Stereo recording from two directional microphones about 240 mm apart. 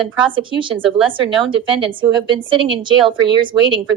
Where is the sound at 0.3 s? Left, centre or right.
Right.